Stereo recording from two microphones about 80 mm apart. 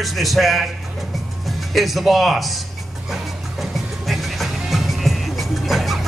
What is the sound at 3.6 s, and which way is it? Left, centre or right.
Music, centre.